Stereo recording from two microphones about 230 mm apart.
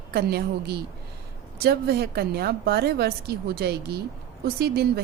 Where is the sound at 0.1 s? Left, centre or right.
Right.